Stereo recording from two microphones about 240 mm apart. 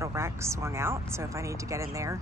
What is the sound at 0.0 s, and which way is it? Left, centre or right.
Speech, centre.